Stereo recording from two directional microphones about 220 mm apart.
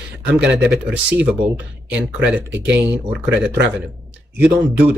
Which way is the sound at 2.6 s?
55° right (ahead or behind).